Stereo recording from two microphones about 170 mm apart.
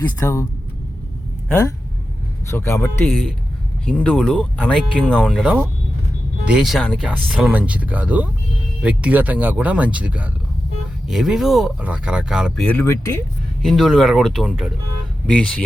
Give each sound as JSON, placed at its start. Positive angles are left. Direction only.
{"t": 0.2, "sound": "speech", "side_deg": 15}
{"t": 1.5, "sound": "speech", "side_deg": 10}
{"t": 5.4, "sound": "speech", "side_deg": -10}
{"t": 12.6, "sound": "speech", "side_deg": 15}
{"t": 13.6, "sound": "speech", "side_deg": 0}